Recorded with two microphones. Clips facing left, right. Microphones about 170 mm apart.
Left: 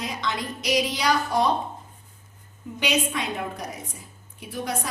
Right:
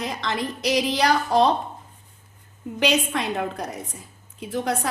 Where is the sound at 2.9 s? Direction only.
65° right (ahead or behind).